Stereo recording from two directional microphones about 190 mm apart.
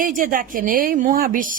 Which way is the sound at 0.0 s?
45° right (ahead or behind).